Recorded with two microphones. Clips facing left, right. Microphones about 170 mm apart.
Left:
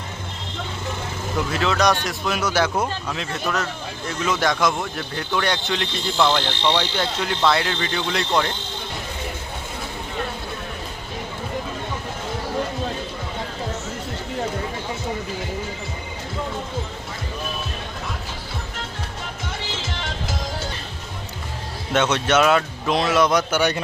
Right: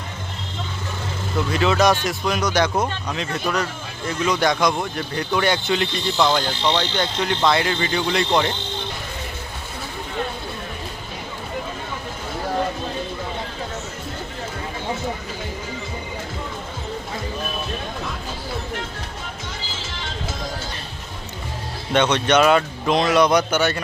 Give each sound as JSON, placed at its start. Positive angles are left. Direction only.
{"t": 1.5, "sound": "speech", "side_deg": 0}
{"t": 6.7, "sound": "speech", "side_deg": 10}
{"t": 21.9, "sound": "speech", "side_deg": 5}
{"t": 23.6, "sound": "a man's voice", "side_deg": 15}